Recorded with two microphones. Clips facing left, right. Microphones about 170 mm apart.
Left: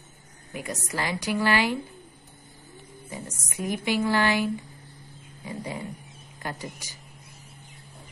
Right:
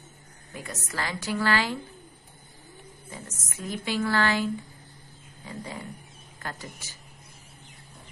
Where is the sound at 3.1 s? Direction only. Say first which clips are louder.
Left 5 dB; 15° left (ahead or behind).